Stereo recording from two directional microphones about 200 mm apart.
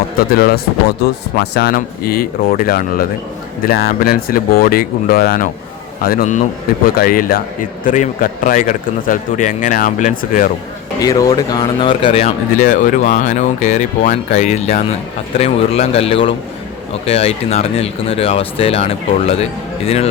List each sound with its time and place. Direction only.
0.2 s speech: 50° left (ahead or behind)
11.0 s speech: 15° left (ahead or behind)